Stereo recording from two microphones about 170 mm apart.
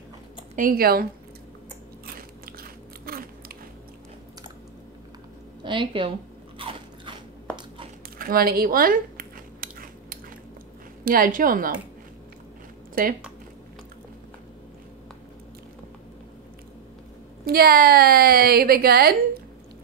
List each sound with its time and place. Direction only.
0.6 s a woman's voice: 60° right (ahead or behind)
2.1 s biting: 60° right (ahead or behind)
5.6 s a woman's voice: 30° right (ahead or behind)
6.6 s crunch: 30° right (ahead or behind)
8.2 s a sound: 60° right (ahead or behind)
11.1 s a woman's voice: 55° right (ahead or behind)
13.0 s a woman's voice: 55° right (ahead or behind)
17.5 s a woman's voice: 60° right (ahead or behind)